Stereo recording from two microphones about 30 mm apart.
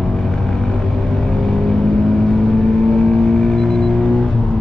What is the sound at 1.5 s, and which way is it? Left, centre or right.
Vehicle, centre.